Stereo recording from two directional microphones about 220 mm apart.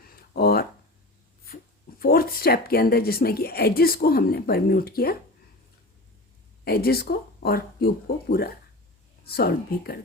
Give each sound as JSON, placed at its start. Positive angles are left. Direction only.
{"t": 0.3, "sound": "a sound", "side_deg": 45}
{"t": 2.0, "sound": "a woman's voice", "side_deg": 45}
{"t": 6.7, "sound": "a woman's voice", "side_deg": 45}